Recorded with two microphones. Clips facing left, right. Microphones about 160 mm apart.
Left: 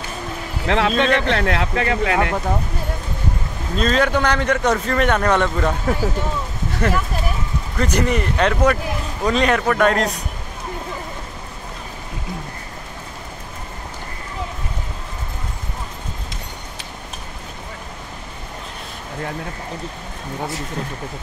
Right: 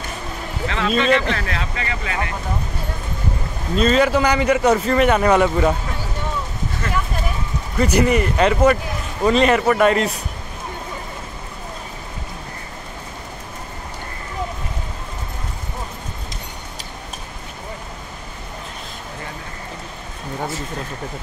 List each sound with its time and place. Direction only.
0.7 s speech: 65° left (ahead or behind)
3.7 s a man's voice: 5° right (ahead or behind)
6.8 s speech: 75° left (ahead or behind)
7.7 s speech: 10° right (ahead or behind)